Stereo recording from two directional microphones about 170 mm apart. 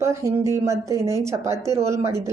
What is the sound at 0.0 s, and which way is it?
A woman's voice, 15° right (ahead or behind).